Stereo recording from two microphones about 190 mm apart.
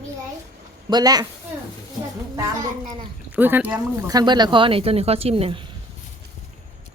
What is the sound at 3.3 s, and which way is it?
Speech, 10° right (ahead or behind).